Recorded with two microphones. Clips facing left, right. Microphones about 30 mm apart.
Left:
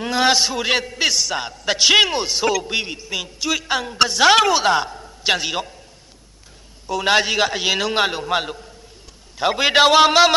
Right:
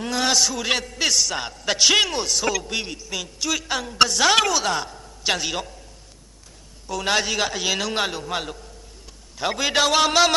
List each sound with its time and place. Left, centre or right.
0.0 s a man's voice: left
6.9 s a man's voice: left
9.7 s a man's voice: left
9.9 s a man's voice: centre